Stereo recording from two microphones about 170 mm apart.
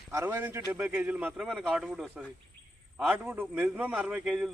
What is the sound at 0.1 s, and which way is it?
A man's voice, 15° right (ahead or behind).